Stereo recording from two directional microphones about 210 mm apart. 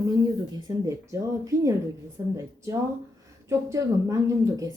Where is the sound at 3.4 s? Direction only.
15° right (ahead or behind).